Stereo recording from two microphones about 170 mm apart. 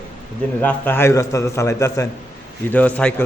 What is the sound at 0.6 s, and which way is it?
A man's voice, 10° left (ahead or behind).